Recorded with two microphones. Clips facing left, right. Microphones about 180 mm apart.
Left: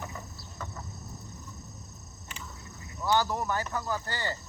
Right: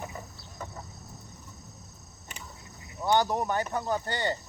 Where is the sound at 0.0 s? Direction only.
20° right (ahead or behind).